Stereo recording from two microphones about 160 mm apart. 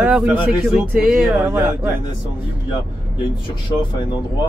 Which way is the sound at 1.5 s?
15° right (ahead or behind).